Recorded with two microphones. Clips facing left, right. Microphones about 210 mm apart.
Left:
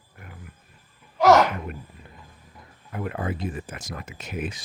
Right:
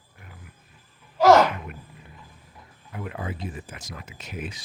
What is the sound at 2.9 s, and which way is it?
Speech, 55° left (ahead or behind).